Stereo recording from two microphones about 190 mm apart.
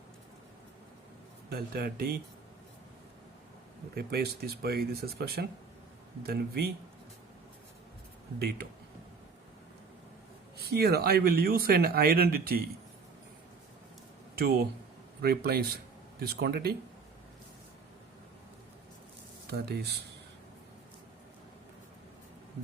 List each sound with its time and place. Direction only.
1.5 s speech: 55° right (ahead or behind)
3.9 s speech: 55° right (ahead or behind)
10.6 s speech: 55° right (ahead or behind)
14.3 s speech: 55° right (ahead or behind)
19.5 s speech: 55° right (ahead or behind)